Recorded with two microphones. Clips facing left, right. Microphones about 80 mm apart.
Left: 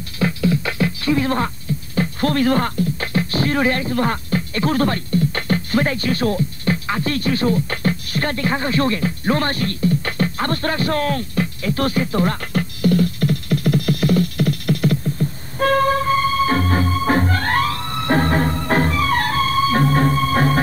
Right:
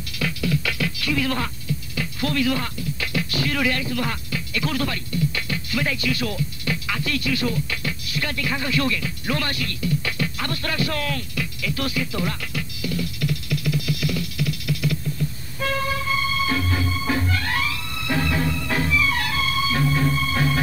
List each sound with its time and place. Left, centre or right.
0.2 s beatboxing: left
2.0 s music: left